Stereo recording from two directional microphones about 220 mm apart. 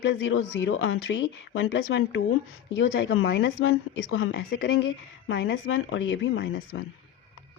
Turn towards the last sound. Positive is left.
turn(degrees=55)  # may be behind; listen again after turning